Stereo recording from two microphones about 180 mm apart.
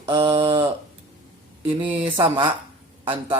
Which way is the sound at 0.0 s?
20° right (ahead or behind).